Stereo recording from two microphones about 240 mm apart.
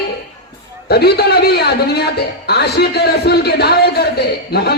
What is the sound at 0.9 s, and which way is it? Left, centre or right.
A man's voice, left.